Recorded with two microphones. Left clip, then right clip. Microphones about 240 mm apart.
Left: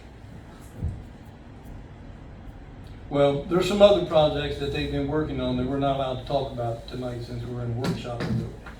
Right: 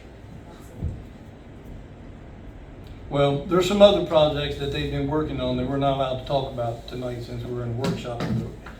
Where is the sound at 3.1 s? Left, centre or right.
Right.